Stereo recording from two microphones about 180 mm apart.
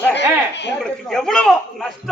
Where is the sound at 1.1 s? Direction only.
5° left (ahead or behind).